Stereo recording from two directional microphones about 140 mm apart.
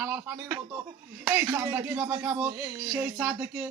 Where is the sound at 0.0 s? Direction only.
10° right (ahead or behind).